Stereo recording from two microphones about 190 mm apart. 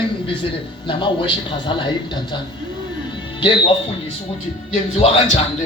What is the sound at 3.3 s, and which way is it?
Speech, 25° left (ahead or behind).